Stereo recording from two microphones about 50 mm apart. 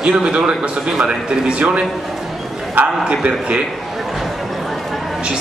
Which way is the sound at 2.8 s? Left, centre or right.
Right.